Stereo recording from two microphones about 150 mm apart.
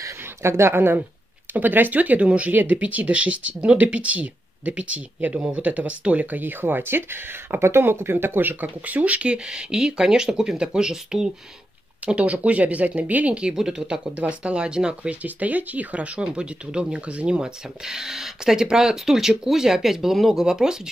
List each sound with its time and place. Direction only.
0.0 s speech: 20° right (ahead or behind)